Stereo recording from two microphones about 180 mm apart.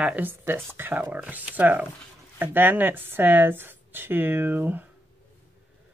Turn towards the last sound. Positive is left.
turn(degrees=-10)  # may be behind; listen again after turning